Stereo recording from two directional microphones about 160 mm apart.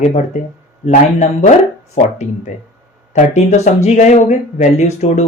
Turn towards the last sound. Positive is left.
turn(degrees=45)  # may be behind; listen again after turning